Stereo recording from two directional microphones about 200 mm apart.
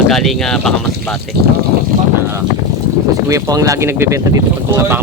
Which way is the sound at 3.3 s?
15° right (ahead or behind).